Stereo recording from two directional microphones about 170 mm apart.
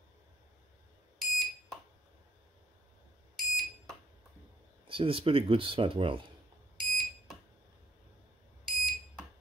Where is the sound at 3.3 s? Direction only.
Centre (ahead or behind).